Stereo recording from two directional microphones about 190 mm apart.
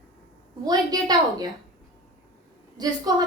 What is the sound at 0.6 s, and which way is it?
Speech, 20° right (ahead or behind).